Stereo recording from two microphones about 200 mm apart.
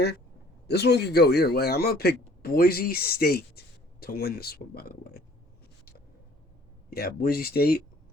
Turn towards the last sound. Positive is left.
turn(degrees=50)  # may be behind; listen again after turning